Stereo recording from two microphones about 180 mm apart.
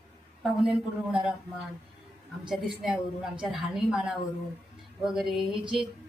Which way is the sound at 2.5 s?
5° right (ahead or behind).